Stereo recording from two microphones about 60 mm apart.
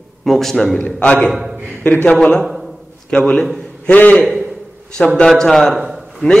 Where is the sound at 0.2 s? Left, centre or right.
Centre.